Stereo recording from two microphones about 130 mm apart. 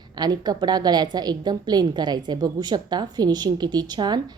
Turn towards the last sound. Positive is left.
turn(degrees=-35)  # may be behind; listen again after turning